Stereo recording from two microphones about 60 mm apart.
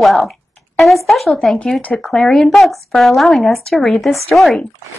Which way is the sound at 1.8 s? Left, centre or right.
Centre.